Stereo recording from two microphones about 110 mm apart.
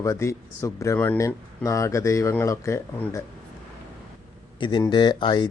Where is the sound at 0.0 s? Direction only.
25° left (ahead or behind).